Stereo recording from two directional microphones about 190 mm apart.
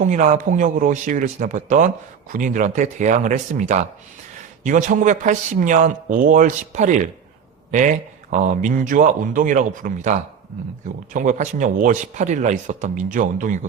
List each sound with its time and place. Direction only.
0.0 s a man's voice: 40° right (ahead or behind)